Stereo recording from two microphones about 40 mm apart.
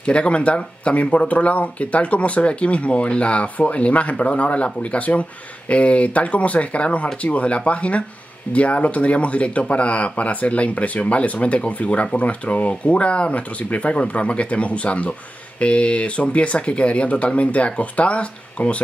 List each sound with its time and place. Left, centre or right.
0.0 s speech: left